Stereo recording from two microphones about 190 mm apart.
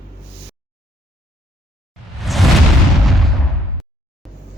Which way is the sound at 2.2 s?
Centre (ahead or behind).